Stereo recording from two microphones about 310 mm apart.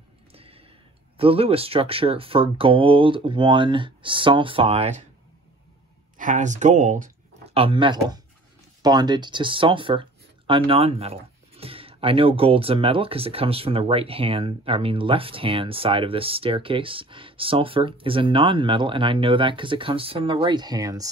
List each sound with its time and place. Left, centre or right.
0.3 s a sound: centre
1.1 s speech: centre
6.1 s speech: right